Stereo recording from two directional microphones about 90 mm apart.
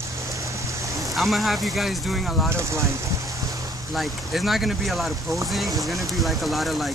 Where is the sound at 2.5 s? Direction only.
30° right (ahead or behind).